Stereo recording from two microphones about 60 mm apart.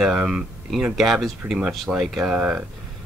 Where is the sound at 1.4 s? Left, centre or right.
Right.